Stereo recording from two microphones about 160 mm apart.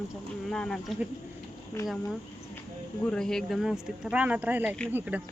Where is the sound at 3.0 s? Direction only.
5° left (ahead or behind); by 5.2 s 10° right (ahead or behind).